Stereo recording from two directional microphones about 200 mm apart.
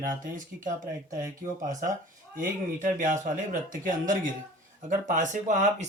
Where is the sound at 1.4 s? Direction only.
40° right (ahead or behind).